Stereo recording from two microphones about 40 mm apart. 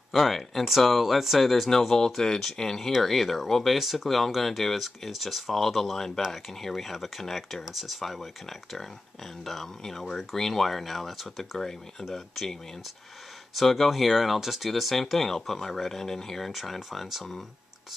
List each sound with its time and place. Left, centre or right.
0.1 s speech: centre
3.7 s speech: centre
13.6 s speech: centre